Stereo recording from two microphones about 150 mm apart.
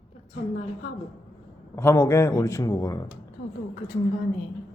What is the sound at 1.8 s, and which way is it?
Speech, 20° left (ahead or behind).